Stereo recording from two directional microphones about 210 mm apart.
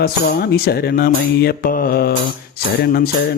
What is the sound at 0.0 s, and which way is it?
Music, 50° left (ahead or behind).